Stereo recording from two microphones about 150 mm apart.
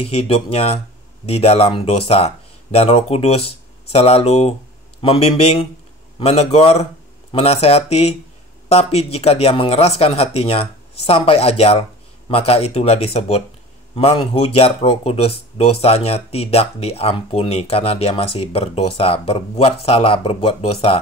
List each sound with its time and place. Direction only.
0.0 s speech: 40° left (ahead or behind)